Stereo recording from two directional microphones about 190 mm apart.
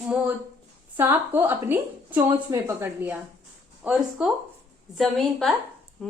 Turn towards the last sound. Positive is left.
turn(degrees=5)  # may be behind; listen again after turning